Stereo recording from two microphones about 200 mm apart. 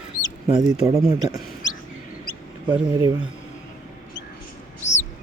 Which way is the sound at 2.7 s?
20° right (ahead or behind).